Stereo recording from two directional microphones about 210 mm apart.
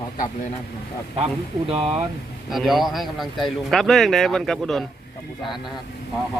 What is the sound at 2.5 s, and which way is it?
Speech, centre (ahead or behind).